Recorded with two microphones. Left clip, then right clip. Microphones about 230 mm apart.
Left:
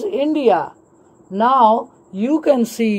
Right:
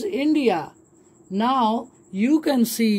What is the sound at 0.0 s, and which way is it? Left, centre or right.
Speech, right.